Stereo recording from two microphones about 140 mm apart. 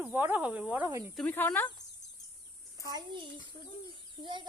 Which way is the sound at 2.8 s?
30° right (ahead or behind).